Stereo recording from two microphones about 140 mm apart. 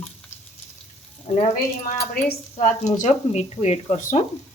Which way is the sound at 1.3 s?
45° left (ahead or behind).